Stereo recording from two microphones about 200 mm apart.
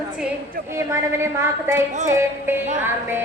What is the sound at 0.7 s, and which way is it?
A woman's voice, 15° right (ahead or behind).